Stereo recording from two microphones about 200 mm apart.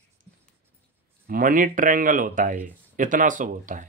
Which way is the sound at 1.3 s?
45° right (ahead or behind).